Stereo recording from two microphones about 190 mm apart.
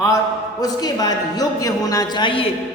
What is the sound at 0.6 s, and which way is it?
A man's voice, 20° left (ahead or behind).